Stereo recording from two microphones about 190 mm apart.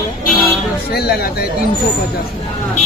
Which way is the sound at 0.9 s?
55° left (ahead or behind).